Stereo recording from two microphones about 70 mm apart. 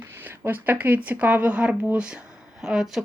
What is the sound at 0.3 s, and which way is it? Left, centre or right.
Speech, right.